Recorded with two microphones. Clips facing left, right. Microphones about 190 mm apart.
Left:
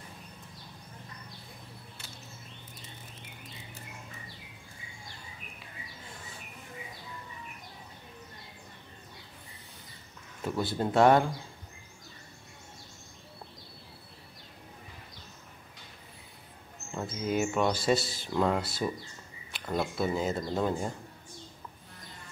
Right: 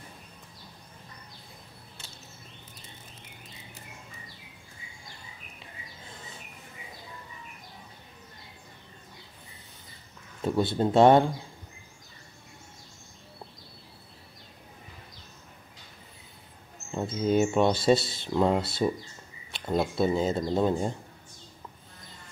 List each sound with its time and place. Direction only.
10.4 s speech: 25° right (ahead or behind)
16.9 s speech: 25° right (ahead or behind)